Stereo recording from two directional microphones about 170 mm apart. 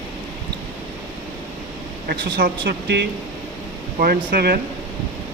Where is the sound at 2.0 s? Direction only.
70° right (ahead or behind).